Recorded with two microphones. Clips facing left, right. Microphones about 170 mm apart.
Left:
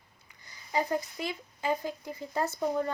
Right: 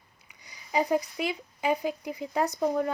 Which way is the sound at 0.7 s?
15° right (ahead or behind).